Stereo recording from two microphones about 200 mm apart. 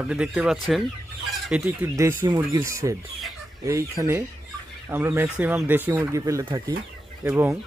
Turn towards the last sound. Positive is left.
turn(degrees=-10)  # may be behind; listen again after turning